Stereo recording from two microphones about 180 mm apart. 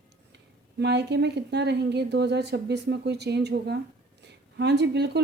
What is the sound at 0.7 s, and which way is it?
Speech, 70° right (ahead or behind).